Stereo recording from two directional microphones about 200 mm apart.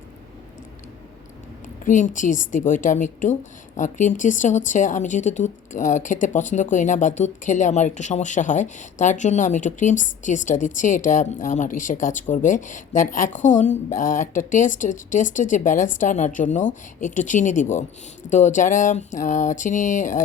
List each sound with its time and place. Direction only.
1.8 s a woman's voice: 40° left (ahead or behind)